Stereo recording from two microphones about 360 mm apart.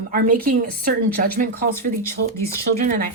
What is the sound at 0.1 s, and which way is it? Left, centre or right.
Speech, right.